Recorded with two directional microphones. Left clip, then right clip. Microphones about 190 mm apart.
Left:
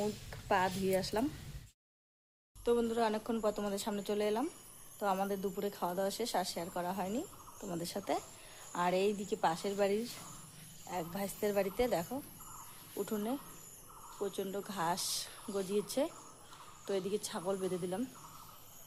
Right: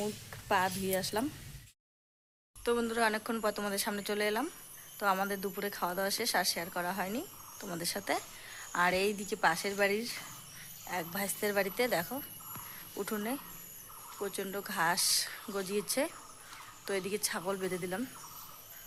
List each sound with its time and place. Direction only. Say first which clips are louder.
0.0 s a woman's voice: even; centre (ahead or behind)
2.6 s a woman's voice: right 2 dB; centre (ahead or behind)
13.0 s speech: right 1 dB; 15° right (ahead or behind)
14.3 s a woman's voice: right 2 dB; 5° right (ahead or behind)